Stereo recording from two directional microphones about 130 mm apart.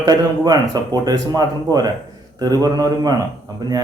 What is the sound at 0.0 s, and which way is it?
Speech, 30° right (ahead or behind).